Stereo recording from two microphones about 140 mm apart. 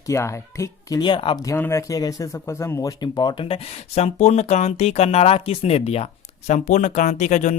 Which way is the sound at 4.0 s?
55° left (ahead or behind).